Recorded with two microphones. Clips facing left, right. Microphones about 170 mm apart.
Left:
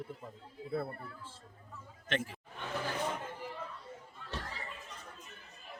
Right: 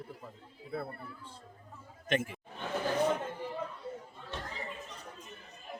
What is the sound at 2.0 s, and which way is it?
Speech, 10° right (ahead or behind).